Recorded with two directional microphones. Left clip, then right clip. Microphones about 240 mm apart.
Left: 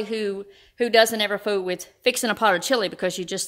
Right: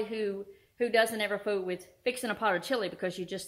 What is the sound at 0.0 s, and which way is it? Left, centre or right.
A woman's voice, left.